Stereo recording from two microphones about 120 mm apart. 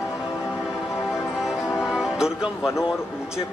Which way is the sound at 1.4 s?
5° right (ahead or behind).